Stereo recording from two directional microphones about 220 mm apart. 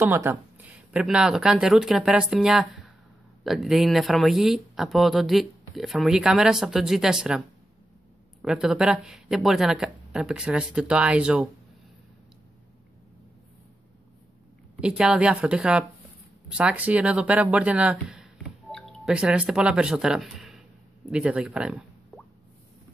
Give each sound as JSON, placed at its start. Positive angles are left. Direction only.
{"t": 0.0, "sound": "speech", "side_deg": -10}
{"t": 14.8, "sound": "speech", "side_deg": -5}